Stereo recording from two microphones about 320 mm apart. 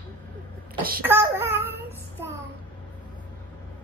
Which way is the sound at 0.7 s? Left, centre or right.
Right.